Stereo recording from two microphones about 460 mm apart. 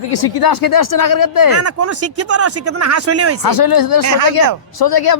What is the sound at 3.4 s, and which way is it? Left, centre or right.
Speech, left.